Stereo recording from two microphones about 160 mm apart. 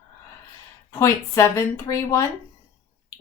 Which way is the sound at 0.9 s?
20° left (ahead or behind).